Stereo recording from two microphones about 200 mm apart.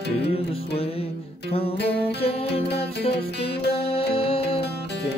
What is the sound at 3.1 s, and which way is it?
Music, 55° left (ahead or behind).